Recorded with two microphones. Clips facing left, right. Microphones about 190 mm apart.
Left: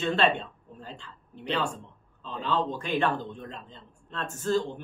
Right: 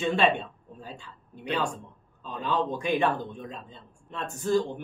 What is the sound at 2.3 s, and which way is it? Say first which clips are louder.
Speech: right 1 dB; 10° right (ahead or behind).